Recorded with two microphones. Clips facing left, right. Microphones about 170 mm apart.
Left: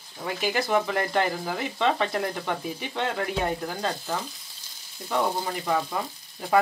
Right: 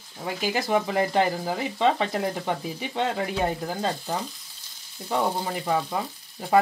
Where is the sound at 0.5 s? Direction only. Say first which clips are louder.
Even; 25° right (ahead or behind).